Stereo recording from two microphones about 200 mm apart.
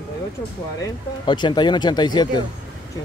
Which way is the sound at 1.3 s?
25° left (ahead or behind).